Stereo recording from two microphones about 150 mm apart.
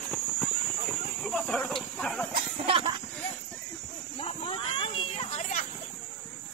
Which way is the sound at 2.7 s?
35° right (ahead or behind).